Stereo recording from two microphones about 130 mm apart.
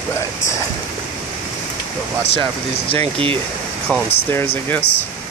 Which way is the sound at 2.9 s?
45° right (ahead or behind).